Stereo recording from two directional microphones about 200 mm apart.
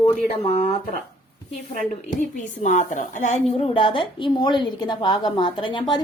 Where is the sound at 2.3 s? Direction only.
35° left (ahead or behind).